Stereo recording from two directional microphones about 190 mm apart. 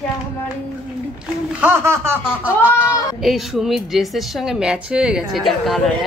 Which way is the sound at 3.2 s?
Centre (ahead or behind).